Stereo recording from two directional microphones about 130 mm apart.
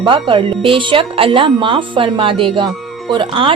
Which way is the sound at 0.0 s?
40° right (ahead or behind).